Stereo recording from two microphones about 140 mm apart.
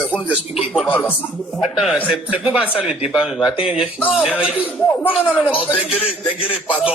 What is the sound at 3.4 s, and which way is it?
Speech, 35° left (ahead or behind).